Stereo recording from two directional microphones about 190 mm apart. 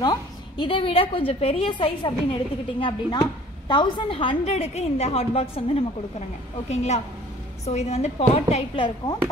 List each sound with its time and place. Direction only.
0.0 s a woman's voice: 25° left (ahead or behind)